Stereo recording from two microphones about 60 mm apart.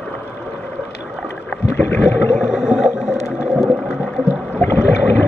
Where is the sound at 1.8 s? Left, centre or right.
Left.